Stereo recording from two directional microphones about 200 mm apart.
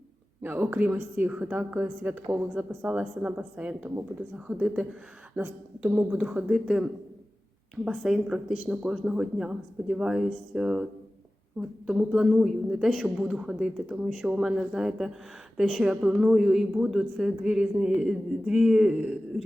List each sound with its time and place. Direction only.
0.4 s a woman's voice: 10° right (ahead or behind)
7.9 s a woman's voice: 5° right (ahead or behind)
11.9 s a woman's voice: centre (ahead or behind)